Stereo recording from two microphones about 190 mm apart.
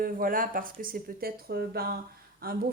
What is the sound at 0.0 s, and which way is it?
A woman's voice, 50° right (ahead or behind).